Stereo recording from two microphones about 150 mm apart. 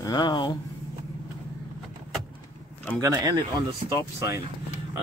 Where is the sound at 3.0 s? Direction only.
20° right (ahead or behind).